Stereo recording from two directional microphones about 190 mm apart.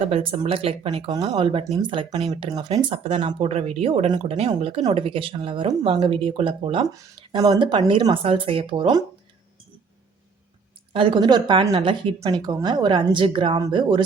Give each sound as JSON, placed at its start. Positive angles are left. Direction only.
{"t": 0.0, "sound": "speech", "side_deg": -30}
{"t": 10.9, "sound": "speech", "side_deg": -25}